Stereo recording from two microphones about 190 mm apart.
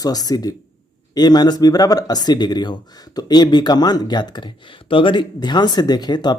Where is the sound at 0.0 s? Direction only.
20° left (ahead or behind).